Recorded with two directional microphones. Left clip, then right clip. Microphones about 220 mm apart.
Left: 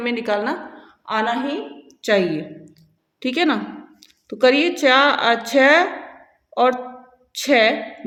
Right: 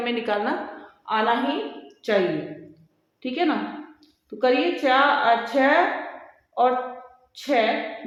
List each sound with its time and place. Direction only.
0.0 s a woman's voice: 40° left (ahead or behind)